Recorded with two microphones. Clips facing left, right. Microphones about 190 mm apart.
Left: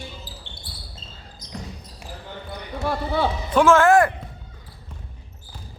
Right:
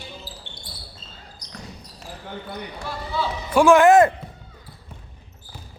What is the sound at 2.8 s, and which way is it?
Basketball bounce, 60° left (ahead or behind).